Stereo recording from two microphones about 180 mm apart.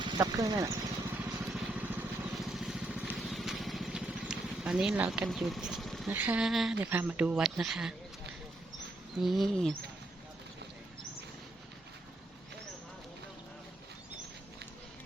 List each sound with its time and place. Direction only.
0.0 s speech: 20° right (ahead or behind)
1.2 s vehicle: centre (ahead or behind)
6.1 s speech: 10° right (ahead or behind)